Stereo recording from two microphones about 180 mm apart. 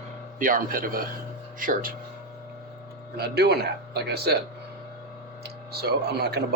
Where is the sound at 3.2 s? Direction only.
65° right (ahead or behind).